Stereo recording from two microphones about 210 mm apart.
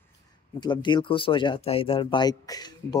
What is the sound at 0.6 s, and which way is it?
Speech, 20° left (ahead or behind).